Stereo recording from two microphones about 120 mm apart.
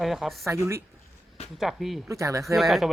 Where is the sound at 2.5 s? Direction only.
Centre (ahead or behind).